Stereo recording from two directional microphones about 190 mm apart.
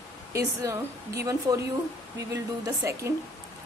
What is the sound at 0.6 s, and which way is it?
A woman's voice, 15° right (ahead or behind).